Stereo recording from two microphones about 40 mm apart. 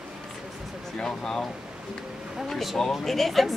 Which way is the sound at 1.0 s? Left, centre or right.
Centre.